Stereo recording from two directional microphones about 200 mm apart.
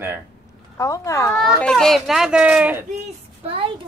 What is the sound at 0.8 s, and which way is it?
Speech, 15° left (ahead or behind).